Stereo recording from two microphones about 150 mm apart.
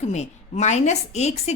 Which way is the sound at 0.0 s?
50° left (ahead or behind).